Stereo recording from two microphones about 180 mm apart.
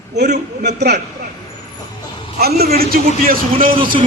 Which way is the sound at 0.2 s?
65° right (ahead or behind).